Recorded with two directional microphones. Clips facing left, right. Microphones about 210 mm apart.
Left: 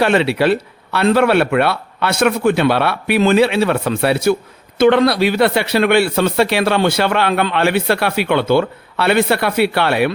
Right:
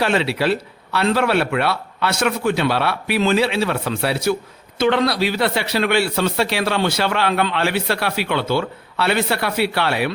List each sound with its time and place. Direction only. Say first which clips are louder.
0.0 s speech: left 5 dB; 60° left (ahead or behind)